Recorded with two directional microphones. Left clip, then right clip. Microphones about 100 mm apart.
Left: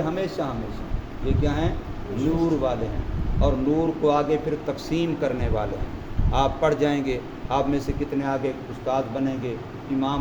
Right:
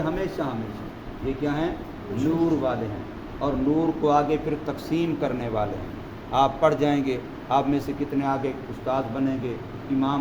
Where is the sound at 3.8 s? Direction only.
25° right (ahead or behind).